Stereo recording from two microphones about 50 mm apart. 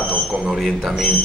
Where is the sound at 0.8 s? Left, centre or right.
Centre.